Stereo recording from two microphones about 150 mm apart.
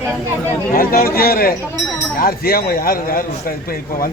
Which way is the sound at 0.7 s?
75° left (ahead or behind).